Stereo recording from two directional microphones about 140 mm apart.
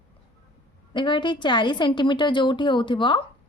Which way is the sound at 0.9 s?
35° left (ahead or behind).